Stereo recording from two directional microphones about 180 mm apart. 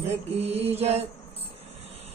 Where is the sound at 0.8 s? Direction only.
35° right (ahead or behind).